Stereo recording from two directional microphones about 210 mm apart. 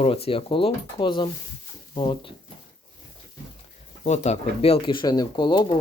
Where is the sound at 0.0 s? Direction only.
25° left (ahead or behind).